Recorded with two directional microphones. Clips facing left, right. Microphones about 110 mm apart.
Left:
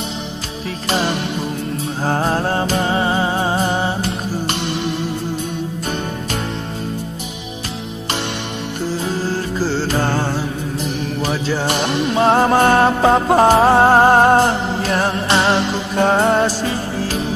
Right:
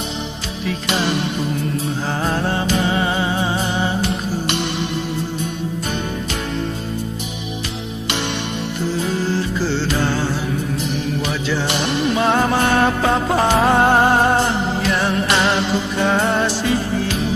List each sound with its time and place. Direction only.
0.7 s music: 40° left (ahead or behind)
2.0 s music: 40° left (ahead or behind)
9.0 s music: 40° left (ahead or behind)